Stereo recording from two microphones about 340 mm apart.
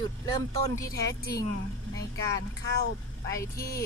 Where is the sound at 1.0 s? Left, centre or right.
Left.